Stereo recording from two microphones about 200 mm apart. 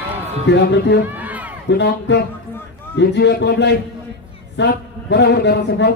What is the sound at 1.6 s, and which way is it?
A man's voice, 60° left (ahead or behind).